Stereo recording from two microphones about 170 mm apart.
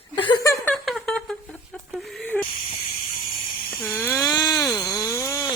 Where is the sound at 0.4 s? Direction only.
15° left (ahead or behind).